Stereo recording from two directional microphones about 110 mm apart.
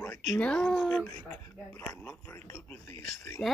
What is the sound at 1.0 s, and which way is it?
Speech, 20° left (ahead or behind).